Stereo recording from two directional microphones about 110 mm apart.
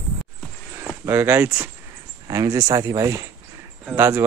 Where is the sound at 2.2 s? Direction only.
30° right (ahead or behind).